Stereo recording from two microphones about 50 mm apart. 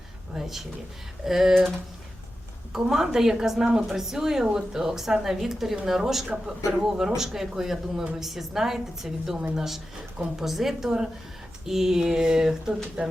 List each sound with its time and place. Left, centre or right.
0.3 s a woman's voice: centre
2.7 s a woman's voice: centre
13.0 s speech: right